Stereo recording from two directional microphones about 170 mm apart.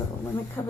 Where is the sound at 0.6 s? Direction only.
15° left (ahead or behind).